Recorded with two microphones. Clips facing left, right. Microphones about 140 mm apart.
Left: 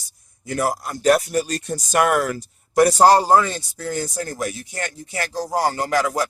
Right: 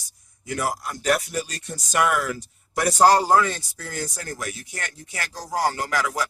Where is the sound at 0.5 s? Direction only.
40° left (ahead or behind).